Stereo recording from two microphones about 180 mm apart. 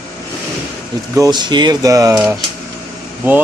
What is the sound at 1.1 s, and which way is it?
Speech, 20° right (ahead or behind).